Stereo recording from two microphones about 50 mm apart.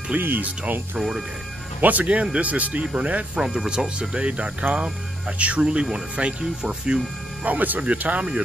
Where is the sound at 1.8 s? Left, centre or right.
Right.